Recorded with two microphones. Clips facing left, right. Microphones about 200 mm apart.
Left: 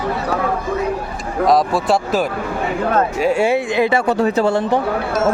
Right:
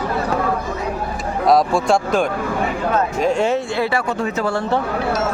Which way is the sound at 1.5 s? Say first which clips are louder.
Right 1 dB; 5° left (ahead or behind).